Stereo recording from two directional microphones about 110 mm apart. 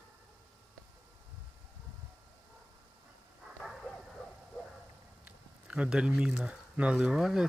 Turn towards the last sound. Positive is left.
turn(degrees=-5)  # may be behind; listen again after turning